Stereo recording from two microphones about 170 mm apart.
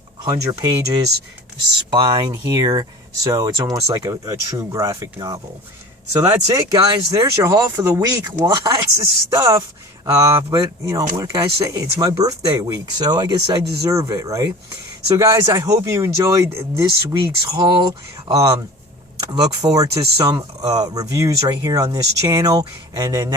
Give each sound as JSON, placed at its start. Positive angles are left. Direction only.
{"t": 0.3, "sound": "speech", "side_deg": -20}